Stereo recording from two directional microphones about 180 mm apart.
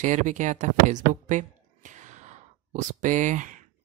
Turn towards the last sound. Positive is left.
turn(degrees=-45)  # may be behind; listen again after turning